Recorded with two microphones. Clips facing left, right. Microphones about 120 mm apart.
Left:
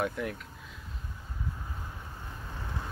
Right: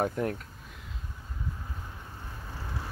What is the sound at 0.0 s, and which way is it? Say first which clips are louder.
Speech: right 3 dB; 40° right (ahead or behind).